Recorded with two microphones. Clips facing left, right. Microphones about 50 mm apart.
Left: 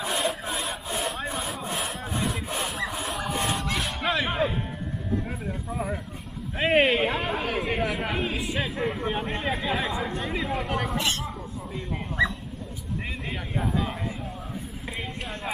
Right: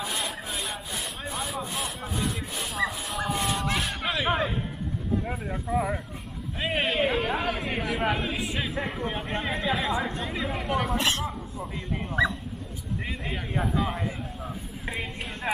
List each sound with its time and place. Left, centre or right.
0.1 s sawing: centre
2.6 s a sound: centre
3.6 s music: centre
5.3 s speech: centre
6.6 s speech: left
6.9 s speech: centre
9.0 s speech: centre
13.6 s speech: centre